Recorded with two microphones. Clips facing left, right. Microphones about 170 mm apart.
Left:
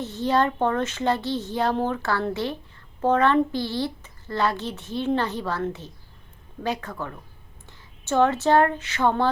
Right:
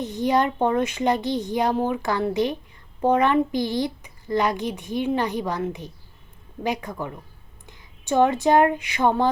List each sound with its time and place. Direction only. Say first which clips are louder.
0.0 s speech: right 1 dB; 15° right (ahead or behind)